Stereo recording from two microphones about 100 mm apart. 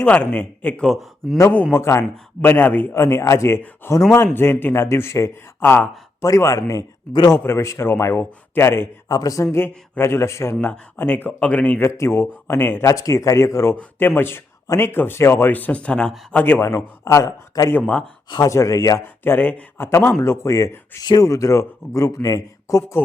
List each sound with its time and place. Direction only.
0.0 s speech: 15° left (ahead or behind)
1.7 s speech: 25° left (ahead or behind)
6.2 s speech: 35° left (ahead or behind)
7.1 s a man's voice: 45° left (ahead or behind)
7.3 s speech: 25° left (ahead or behind)
9.0 s speech: 40° left (ahead or behind); by 11.8 s 15° left (ahead or behind)
11.8 s speech: 25° left (ahead or behind)
12.9 s speech: 35° left (ahead or behind); by 16.6 s 15° left (ahead or behind)
16.6 s speech: 30° left (ahead or behind)
17.7 s speech: 15° left (ahead or behind)
18.4 s speech: 35° left (ahead or behind)
19.0 s speech: 20° left (ahead or behind)
21.0 s a man's voice: 45° left (ahead or behind)
21.2 s speech: 30° left (ahead or behind)